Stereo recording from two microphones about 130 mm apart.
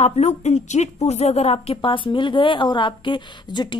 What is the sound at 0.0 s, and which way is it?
A woman's voice, 55° left (ahead or behind).